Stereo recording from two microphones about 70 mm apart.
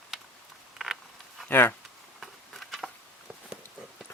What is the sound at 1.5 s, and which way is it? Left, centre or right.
Speech, left.